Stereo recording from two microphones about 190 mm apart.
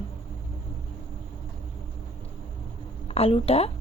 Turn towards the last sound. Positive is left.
turn(degrees=30)  # may be behind; listen again after turning